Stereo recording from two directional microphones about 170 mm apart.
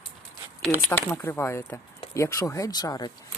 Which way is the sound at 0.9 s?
15° left (ahead or behind).